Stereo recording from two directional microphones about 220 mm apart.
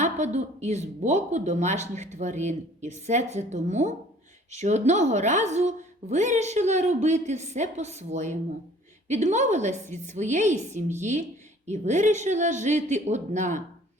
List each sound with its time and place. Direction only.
0.0 s a woman's voice: 30° right (ahead or behind)